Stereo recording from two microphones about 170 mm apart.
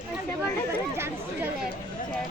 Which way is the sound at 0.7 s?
10° right (ahead or behind).